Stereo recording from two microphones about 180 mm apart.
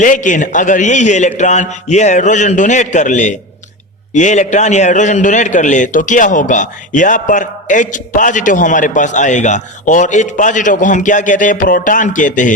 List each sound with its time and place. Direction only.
0.0 s a man's voice: 45° left (ahead or behind)